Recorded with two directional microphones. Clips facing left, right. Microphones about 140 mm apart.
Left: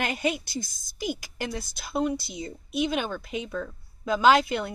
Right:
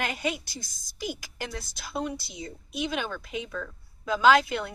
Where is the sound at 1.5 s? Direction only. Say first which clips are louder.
Left 5 dB; 15° left (ahead or behind).